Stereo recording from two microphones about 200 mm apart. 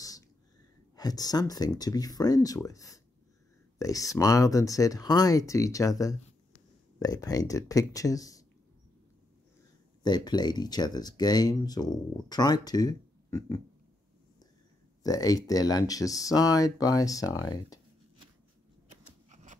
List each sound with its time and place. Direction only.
0.9 s speech: 20° left (ahead or behind)
10.0 s speech: 20° left (ahead or behind)
15.0 s speech: 20° left (ahead or behind)
19.2 s scissors: 35° right (ahead or behind)